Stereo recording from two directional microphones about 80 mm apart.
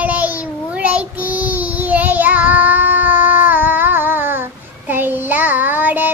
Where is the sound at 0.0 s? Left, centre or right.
Centre.